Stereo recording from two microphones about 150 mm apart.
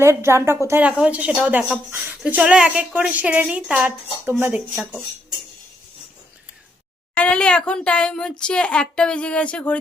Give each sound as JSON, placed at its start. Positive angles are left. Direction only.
{"t": 0.0, "sound": "speech", "side_deg": -20}
{"t": 4.7, "sound": "speech", "side_deg": 0}
{"t": 7.2, "sound": "speech", "side_deg": 5}